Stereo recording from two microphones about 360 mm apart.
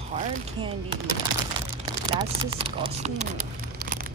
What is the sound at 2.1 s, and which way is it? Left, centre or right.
Speech, centre.